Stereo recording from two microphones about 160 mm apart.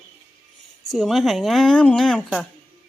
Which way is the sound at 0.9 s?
Centre (ahead or behind).